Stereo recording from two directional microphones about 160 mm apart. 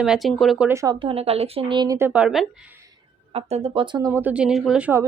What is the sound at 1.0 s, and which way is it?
Speech, 35° right (ahead or behind).